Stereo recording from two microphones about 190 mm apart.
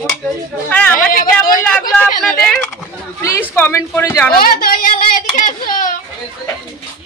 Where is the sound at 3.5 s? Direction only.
10° left (ahead or behind).